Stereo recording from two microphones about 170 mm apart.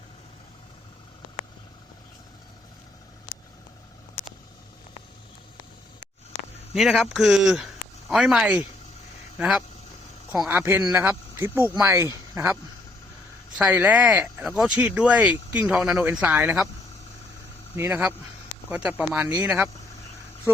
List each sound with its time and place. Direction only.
6.7 s speech: centre (ahead or behind)
13.6 s speech: 10° right (ahead or behind)
17.7 s speech: 10° right (ahead or behind)